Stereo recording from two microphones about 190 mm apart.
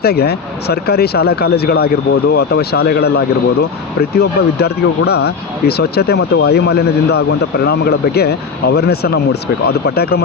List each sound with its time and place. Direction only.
0.0 s speech: 55° left (ahead or behind)
4.2 s speech: 55° left (ahead or behind)